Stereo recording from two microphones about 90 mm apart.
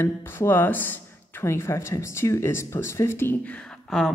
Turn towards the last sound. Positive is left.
turn(degrees=0)  # may be behind; listen again after turning